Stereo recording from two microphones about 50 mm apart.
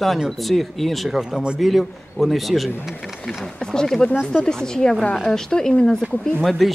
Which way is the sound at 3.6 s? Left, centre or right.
Centre.